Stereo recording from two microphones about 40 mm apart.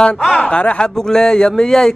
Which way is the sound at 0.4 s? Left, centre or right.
Left.